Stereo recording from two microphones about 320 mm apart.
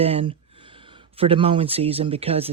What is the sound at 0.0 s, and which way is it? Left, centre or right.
Speech, centre.